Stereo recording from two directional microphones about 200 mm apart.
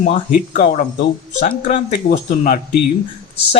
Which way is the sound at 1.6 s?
30° left (ahead or behind).